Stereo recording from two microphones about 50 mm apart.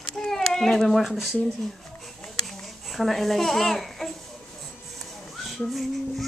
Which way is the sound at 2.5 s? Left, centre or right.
Centre.